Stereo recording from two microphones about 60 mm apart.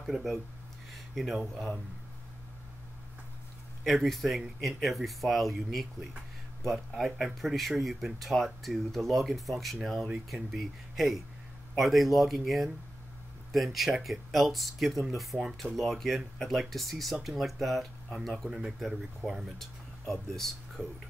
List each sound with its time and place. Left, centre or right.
0.0 s speech: centre
3.8 s speech: centre
19.6 s speech: centre